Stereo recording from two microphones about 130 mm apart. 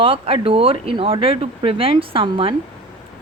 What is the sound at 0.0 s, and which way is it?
A woman's voice, 45° right (ahead or behind).